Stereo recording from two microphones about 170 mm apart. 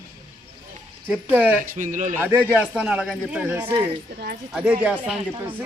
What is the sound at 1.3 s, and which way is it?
Speech, 10° right (ahead or behind).